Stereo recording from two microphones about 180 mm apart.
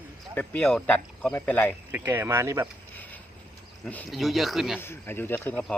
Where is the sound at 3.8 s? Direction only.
5° left (ahead or behind).